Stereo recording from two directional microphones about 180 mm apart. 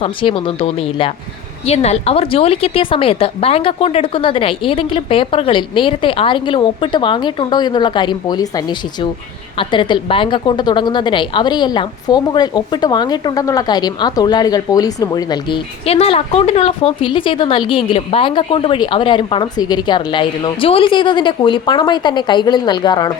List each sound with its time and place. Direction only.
0.0 s a woman's voice: 30° left (ahead or behind)